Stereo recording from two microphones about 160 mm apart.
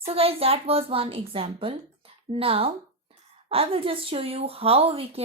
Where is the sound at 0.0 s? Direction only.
40° right (ahead or behind).